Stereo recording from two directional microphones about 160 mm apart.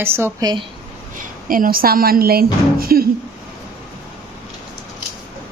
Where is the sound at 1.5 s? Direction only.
60° right (ahead or behind).